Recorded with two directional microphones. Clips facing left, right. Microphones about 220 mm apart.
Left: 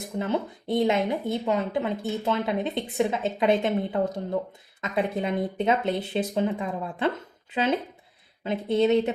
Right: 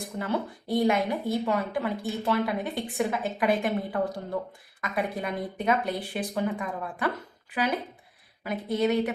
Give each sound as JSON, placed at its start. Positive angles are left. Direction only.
{"t": 0.2, "sound": "speech", "side_deg": 20}